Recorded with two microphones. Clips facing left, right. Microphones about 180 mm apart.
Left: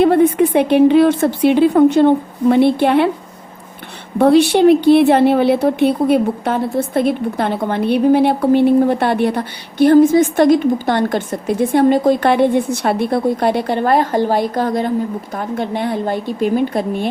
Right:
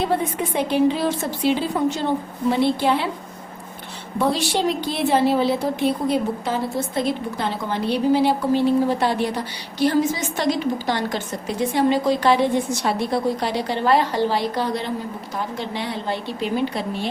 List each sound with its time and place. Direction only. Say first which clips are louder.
0.0 s a woman's voice: left 11 dB; 60° left (ahead or behind)
4.2 s a woman's voice: left 11 dB; 60° left (ahead or behind)